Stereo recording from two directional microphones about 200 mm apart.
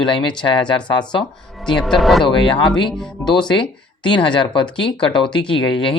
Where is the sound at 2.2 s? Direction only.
25° left (ahead or behind).